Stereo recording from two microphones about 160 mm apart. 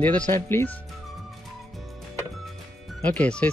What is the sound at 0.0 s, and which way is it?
Speech, 10° left (ahead or behind).